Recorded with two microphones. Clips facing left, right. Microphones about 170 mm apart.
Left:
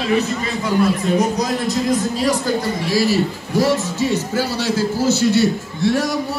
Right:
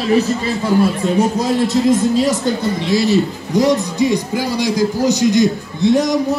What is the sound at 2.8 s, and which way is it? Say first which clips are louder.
A man's voice: right 3 dB; 20° right (ahead or behind).